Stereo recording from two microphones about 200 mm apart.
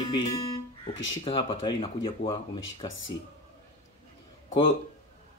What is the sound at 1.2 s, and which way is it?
Speech, 25° left (ahead or behind).